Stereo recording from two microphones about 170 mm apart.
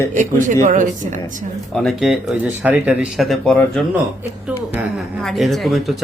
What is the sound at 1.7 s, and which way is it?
Speech, centre (ahead or behind).